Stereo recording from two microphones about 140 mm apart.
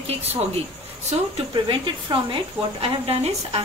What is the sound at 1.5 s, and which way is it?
Speech, 30° right (ahead or behind).